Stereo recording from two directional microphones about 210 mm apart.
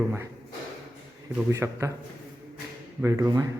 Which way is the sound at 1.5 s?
15° right (ahead or behind).